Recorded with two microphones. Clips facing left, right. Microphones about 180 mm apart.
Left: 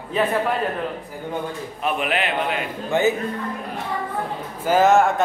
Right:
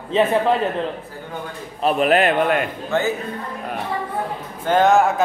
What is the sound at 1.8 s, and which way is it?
Speech, 40° right (ahead or behind).